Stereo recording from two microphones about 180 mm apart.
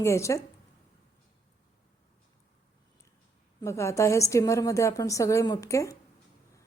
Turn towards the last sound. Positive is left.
turn(degrees=15)  # may be behind; listen again after turning